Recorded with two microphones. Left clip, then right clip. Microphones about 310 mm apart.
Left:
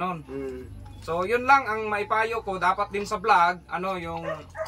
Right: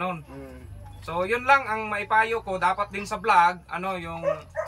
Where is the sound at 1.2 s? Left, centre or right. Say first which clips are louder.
Left 1 dB; centre.